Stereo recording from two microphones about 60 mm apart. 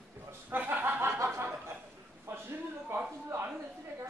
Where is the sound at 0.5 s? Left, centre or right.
Right.